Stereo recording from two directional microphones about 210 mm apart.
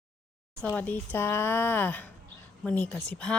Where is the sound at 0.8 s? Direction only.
10° left (ahead or behind).